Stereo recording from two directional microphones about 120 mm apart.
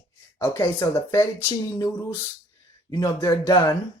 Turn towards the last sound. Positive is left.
turn(degrees=30)  # may be behind; listen again after turning